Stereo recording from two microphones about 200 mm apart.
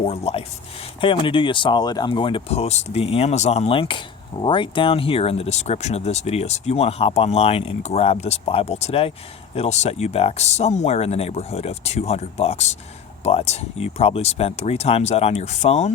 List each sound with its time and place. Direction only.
0.1 s speech: 30° left (ahead or behind)